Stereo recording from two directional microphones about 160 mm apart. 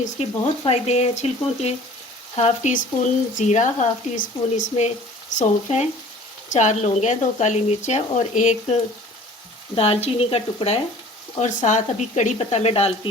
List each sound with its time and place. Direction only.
0.2 s speech: 40° left (ahead or behind)
11.3 s speech: 50° left (ahead or behind)